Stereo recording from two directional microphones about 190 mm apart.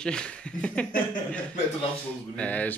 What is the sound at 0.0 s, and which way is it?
Speech, 5° left (ahead or behind).